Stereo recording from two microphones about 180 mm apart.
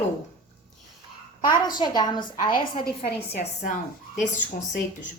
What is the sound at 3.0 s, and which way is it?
A woman's voice, 40° left (ahead or behind).